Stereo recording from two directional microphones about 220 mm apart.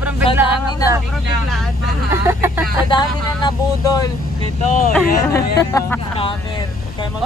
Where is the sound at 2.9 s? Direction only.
20° left (ahead or behind).